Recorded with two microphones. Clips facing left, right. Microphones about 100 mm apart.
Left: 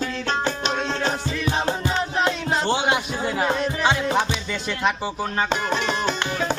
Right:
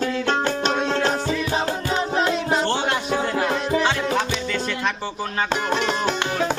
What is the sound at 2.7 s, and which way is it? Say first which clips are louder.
Music: left 1 dB; 10° left (ahead or behind).